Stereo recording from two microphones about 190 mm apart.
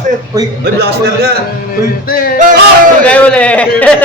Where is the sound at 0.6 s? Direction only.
55° right (ahead or behind).